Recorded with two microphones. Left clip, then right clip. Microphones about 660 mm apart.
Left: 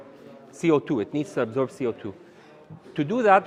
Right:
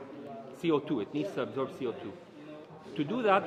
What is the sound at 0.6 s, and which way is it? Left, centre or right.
Speech, left.